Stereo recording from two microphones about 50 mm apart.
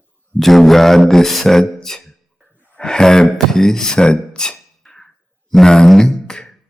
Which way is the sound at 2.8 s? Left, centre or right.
Centre.